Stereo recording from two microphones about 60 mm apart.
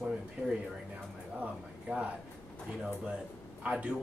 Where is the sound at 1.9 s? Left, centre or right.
Right.